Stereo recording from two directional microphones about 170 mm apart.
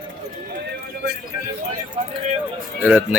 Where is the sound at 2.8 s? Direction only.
10° right (ahead or behind).